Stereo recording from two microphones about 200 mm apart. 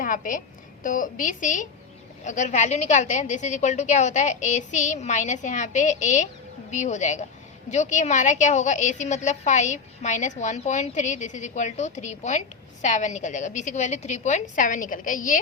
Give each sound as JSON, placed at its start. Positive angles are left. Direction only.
{"t": 0.0, "sound": "a woman's voice", "side_deg": 40}